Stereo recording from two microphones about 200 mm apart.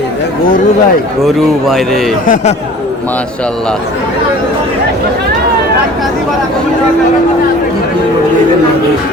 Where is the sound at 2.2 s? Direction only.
40° left (ahead or behind).